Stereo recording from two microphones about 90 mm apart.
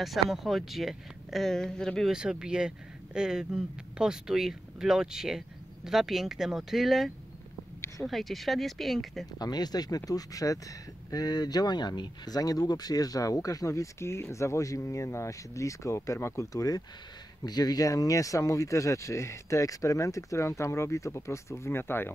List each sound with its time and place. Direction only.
0.0 s speech: centre (ahead or behind)
2.1 s speech: 10° right (ahead or behind)
9.4 s speech: 50° left (ahead or behind); by 22.1 s 25° left (ahead or behind)